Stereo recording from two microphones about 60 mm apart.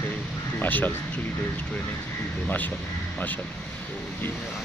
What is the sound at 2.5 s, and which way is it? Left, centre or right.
Speech, left.